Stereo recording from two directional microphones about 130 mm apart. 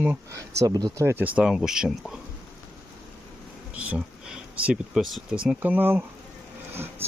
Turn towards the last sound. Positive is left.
turn(degrees=-20)  # may be behind; listen again after turning